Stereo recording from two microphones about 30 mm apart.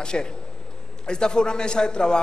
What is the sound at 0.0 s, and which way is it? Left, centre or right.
A man's voice, left.